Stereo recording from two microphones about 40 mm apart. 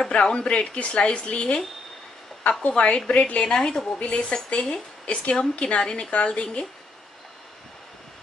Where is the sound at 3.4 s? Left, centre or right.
Centre.